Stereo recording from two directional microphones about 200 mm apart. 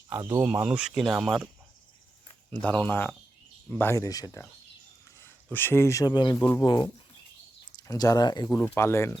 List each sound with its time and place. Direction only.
0.1 s speech: 10° right (ahead or behind)
2.5 s speech: 5° left (ahead or behind)